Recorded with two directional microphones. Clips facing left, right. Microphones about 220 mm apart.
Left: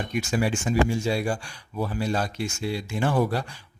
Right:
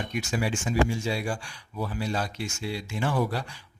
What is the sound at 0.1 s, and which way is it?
Speech, 45° left (ahead or behind).